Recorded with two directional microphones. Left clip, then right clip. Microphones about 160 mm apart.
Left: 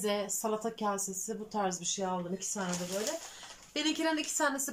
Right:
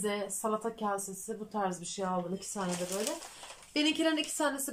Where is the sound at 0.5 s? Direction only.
Centre (ahead or behind).